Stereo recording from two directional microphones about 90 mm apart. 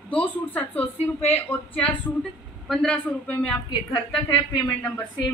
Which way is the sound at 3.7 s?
65° left (ahead or behind).